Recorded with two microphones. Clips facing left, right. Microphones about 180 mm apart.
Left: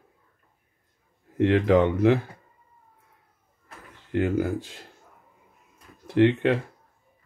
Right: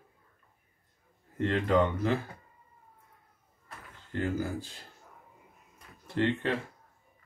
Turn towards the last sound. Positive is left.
turn(degrees=70)  # may be behind; listen again after turning